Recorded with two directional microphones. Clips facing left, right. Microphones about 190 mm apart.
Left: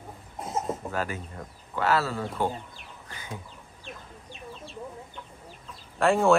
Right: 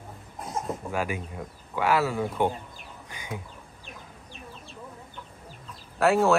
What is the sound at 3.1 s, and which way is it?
Bird, 15° right (ahead or behind).